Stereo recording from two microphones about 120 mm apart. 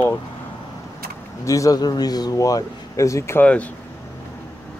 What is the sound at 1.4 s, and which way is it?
Speech, 25° left (ahead or behind).